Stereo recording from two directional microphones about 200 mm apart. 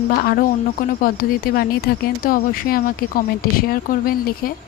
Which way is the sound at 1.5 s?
45° left (ahead or behind).